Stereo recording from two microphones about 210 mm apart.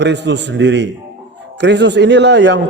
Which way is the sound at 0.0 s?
55° right (ahead or behind).